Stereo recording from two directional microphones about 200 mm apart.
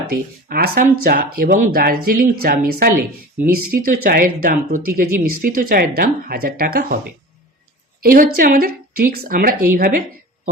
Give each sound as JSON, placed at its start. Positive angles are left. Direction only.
{"t": 0.1, "sound": "speech", "side_deg": -45}
{"t": 8.0, "sound": "speech", "side_deg": -45}